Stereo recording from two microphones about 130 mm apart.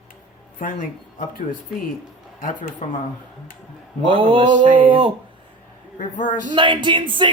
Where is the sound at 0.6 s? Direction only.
90° left.